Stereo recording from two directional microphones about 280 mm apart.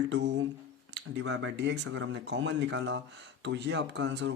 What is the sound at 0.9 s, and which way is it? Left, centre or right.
Speech, right.